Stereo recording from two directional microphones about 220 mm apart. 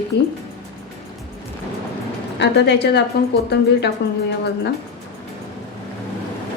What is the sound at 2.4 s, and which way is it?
A woman's voice, 50° left (ahead or behind).